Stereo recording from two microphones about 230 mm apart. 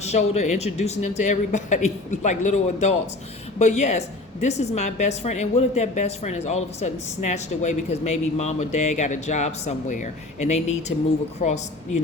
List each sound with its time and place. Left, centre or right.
0.0 s speech: left